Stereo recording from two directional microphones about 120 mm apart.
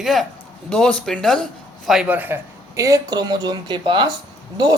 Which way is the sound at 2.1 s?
15° right (ahead or behind).